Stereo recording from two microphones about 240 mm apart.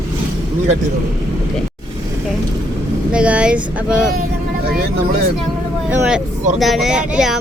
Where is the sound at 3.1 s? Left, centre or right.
Centre.